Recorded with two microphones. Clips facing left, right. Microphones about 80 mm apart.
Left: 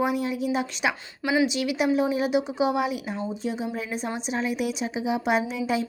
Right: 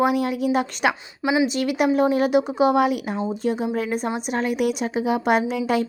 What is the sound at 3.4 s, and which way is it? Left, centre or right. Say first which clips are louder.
A woman's voice: right 9 dB; right.